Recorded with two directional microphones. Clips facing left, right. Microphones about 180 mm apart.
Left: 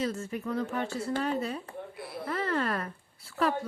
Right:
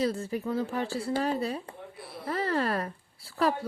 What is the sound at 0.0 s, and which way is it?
Speech, 35° right (ahead or behind).